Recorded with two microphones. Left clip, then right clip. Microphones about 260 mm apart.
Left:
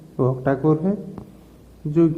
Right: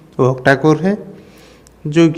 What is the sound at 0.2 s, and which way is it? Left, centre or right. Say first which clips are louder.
Speech: right 9 dB; right.